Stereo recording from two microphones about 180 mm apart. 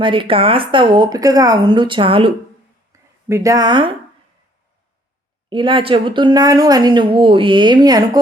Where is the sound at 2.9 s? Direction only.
15° right (ahead or behind).